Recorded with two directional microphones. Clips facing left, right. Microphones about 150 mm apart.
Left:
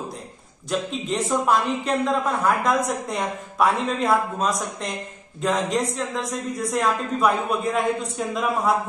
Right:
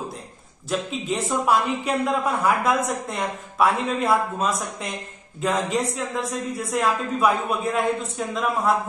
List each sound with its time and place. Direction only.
0.7 s a man's voice: centre (ahead or behind)